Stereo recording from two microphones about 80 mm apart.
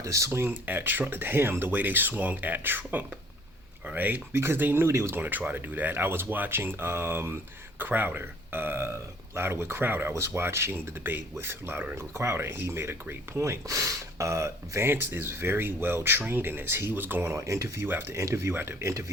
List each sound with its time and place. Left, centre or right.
0.0 s speech: right
0.5 s a man's voice: right
17.3 s speech: right